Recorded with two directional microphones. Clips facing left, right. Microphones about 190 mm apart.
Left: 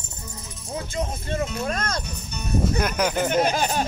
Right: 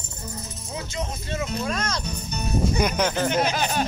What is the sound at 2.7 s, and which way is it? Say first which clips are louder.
Speech: even; 5° left (ahead or behind).